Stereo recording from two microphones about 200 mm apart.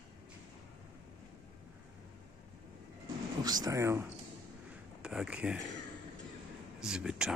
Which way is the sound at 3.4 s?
20° right (ahead or behind).